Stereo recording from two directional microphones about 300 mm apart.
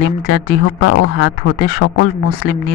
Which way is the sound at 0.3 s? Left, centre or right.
Left.